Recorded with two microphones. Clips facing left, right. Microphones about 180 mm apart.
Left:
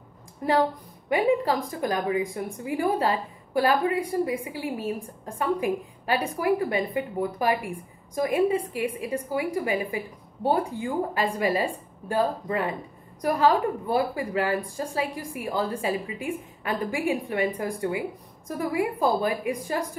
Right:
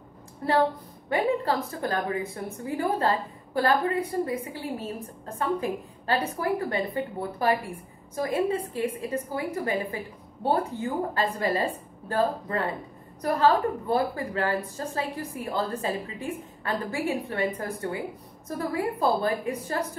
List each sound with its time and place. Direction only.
0.4 s a woman's voice: 15° left (ahead or behind)